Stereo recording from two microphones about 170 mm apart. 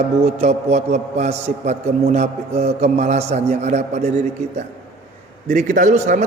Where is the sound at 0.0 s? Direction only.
35° right (ahead or behind).